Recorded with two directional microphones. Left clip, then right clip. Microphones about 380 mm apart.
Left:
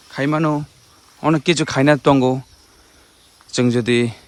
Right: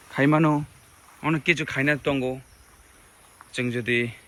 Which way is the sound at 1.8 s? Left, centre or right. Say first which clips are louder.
Left 10 dB; left.